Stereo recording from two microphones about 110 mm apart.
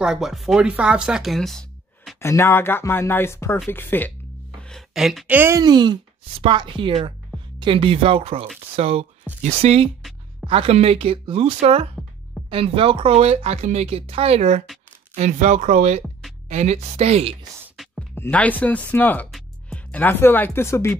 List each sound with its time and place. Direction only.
0.0 s speech: 5° right (ahead or behind)
2.1 s speech: 25° left (ahead or behind)
4.9 s speech: 5° right (ahead or behind)
5.3 s speech: 20° right (ahead or behind)
5.6 s a woman's voice: 40° right (ahead or behind); by 17.4 s 65° right (ahead or behind)
17.8 s music: centre (ahead or behind)
18.1 s speech: 15° left (ahead or behind)